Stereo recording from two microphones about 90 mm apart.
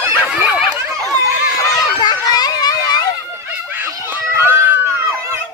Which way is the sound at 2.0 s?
50° left (ahead or behind).